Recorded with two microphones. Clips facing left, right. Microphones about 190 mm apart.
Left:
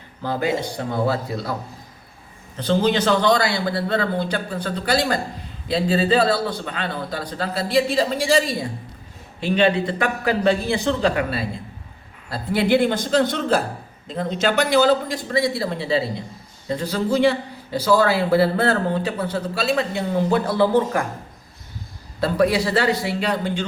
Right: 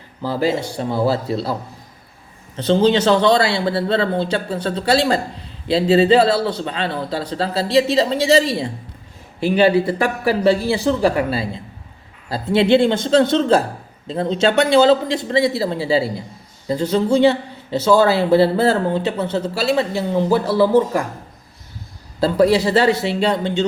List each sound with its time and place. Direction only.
0.3 s a man's voice: 30° right (ahead or behind)
2.6 s a man's voice: 30° right (ahead or behind)
22.2 s a man's voice: 30° right (ahead or behind)